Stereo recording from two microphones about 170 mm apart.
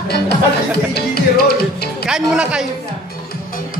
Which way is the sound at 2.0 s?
5° right (ahead or behind).